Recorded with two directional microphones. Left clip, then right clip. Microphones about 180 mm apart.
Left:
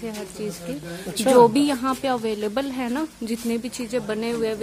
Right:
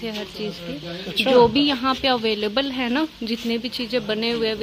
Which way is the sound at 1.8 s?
5° left (ahead or behind).